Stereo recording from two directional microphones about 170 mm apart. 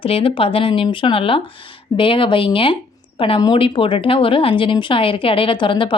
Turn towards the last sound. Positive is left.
turn(degrees=30)  # may be behind; listen again after turning